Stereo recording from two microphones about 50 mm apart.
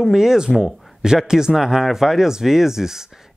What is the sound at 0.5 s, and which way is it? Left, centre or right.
Speech, centre.